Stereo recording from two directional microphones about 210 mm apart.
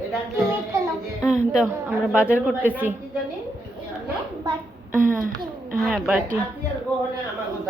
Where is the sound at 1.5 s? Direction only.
5° right (ahead or behind).